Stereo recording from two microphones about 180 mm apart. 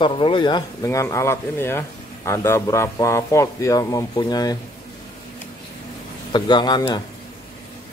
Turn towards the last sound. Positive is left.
turn(degrees=25)  # may be behind; listen again after turning